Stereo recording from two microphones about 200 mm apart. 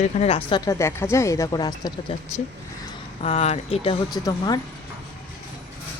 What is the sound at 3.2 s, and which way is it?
Speech, 35° left (ahead or behind).